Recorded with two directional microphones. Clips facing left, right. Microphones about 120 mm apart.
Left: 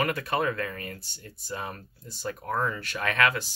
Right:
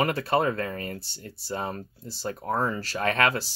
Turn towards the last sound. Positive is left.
turn(degrees=-35)  # may be behind; listen again after turning